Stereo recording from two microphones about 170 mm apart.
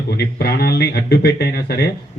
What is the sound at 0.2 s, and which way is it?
A man's voice, 70° left (ahead or behind).